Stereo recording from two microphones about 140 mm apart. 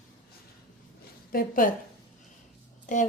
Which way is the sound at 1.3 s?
80° left.